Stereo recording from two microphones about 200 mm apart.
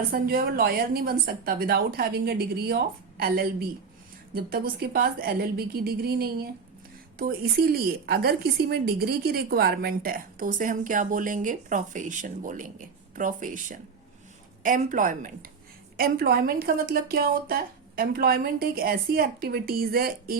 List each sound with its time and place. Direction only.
0.1 s a woman's voice: 45° right (ahead or behind)